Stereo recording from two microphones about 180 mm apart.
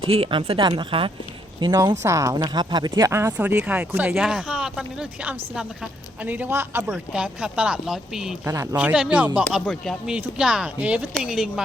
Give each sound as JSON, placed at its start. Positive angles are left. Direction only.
{"t": 0.1, "sound": "speech", "side_deg": -30}
{"t": 1.7, "sound": "speech", "side_deg": -15}